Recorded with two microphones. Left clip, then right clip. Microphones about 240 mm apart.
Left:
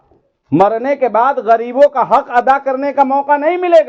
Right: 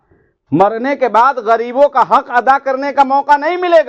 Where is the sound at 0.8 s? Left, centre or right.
Right.